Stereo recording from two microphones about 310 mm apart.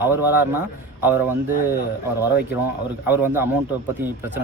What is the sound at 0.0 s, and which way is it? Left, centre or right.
A man's voice, centre.